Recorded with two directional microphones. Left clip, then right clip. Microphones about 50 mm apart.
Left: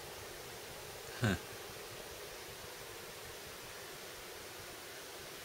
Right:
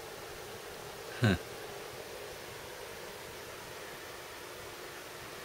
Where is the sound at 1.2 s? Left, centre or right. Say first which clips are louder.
Right 5 dB; left.